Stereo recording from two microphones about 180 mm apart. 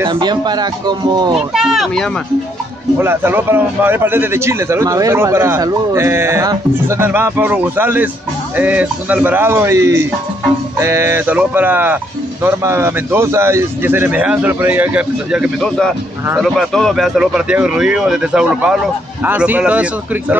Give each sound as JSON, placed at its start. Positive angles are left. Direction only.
{"t": 0.1, "sound": "speech", "side_deg": -25}
{"t": 1.5, "sound": "speech", "side_deg": -5}
{"t": 3.0, "sound": "a man's voice", "side_deg": -10}